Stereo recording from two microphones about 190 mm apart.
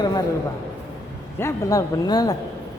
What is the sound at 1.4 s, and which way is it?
Speech, 15° left (ahead or behind).